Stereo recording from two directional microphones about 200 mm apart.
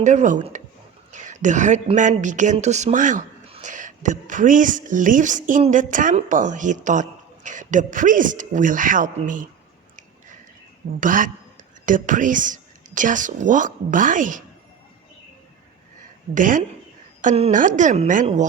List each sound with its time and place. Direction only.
0.0 s a woman's voice: 35° right (ahead or behind)
11.0 s a man's voice: 40° right (ahead or behind)
16.3 s a woman's voice: 40° right (ahead or behind)